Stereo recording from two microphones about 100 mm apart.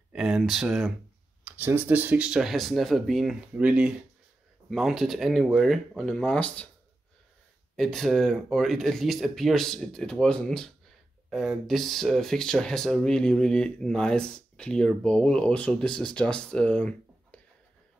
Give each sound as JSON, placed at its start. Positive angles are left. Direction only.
{"t": 0.1, "sound": "speech", "side_deg": 0}
{"t": 1.4, "sound": "speech", "side_deg": -20}
{"t": 7.7, "sound": "speech", "side_deg": 5}